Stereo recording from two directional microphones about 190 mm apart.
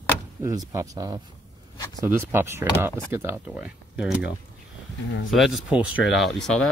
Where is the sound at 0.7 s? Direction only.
20° right (ahead or behind); by 4.3 s 5° right (ahead or behind).